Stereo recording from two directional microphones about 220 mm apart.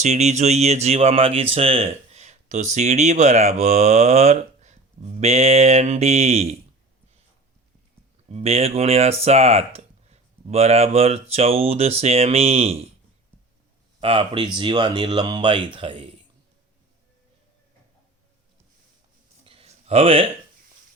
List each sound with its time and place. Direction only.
0.0 s speech: 30° right (ahead or behind)
8.3 s speech: 25° right (ahead or behind)
14.0 s speech: 25° right (ahead or behind)
19.5 s a sound: 25° right (ahead or behind)